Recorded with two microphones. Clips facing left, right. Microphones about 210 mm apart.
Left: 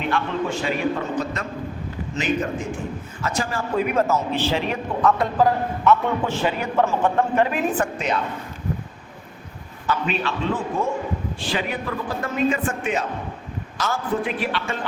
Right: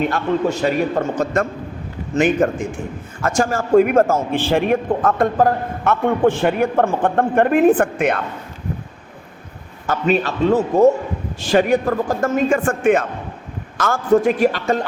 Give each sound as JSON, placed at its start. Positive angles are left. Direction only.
{"t": 0.1, "sound": "a man's voice", "side_deg": -40}
{"t": 9.8, "sound": "a man's voice", "side_deg": -45}